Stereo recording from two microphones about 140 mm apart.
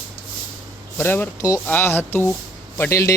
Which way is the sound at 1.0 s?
15° left (ahead or behind).